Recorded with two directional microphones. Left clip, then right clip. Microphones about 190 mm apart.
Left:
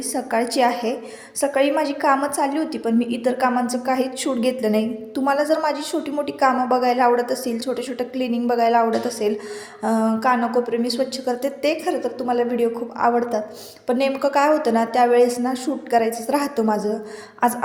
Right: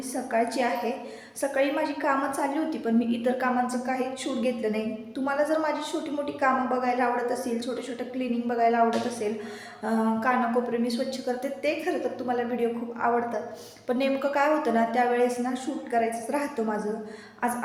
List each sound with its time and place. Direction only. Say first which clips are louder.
0.1 s a woman's voice: left 4 dB; 50° left (ahead or behind)